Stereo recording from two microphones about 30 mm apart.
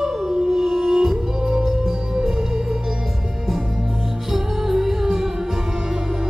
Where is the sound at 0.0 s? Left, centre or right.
Centre.